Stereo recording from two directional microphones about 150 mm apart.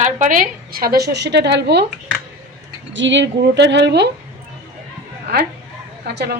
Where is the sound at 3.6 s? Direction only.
90° right.